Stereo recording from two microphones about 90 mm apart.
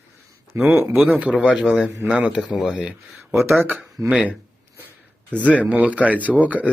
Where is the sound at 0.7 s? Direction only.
25° right (ahead or behind); by 2.9 s 5° right (ahead or behind).